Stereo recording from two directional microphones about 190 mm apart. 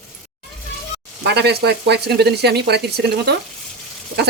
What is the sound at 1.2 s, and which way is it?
Speech, 60° right (ahead or behind).